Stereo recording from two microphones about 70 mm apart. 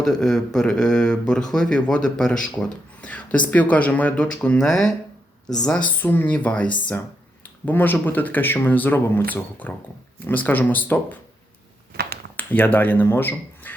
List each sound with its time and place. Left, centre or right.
0.0 s speech: centre
4.4 s speech: centre
5.8 s speech: left
12.4 s speech: left